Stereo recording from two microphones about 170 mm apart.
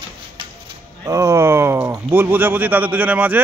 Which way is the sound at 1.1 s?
20° right (ahead or behind).